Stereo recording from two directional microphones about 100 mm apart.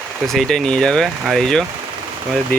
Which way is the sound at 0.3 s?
5° left (ahead or behind).